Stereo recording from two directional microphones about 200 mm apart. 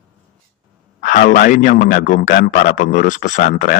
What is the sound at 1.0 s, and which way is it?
A man's voice, 45° left (ahead or behind).